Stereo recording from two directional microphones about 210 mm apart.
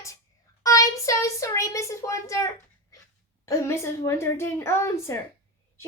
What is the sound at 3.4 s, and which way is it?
A child's voice, 15° left (ahead or behind).